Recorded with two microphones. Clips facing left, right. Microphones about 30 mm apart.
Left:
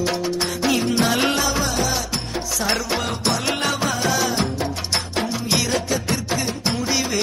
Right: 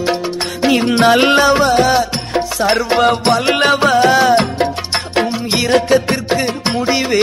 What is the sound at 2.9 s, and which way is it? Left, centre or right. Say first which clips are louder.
Music: right 11 dB; right.